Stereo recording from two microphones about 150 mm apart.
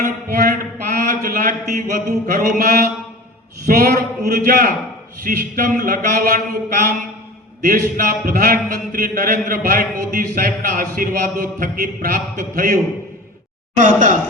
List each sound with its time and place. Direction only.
0.0 s mantra: 55° right (ahead or behind)
3.7 s speech: 80° right
4.4 s a sound: 70° right (ahead or behind)
12.4 s a man's voice: 60° right (ahead or behind)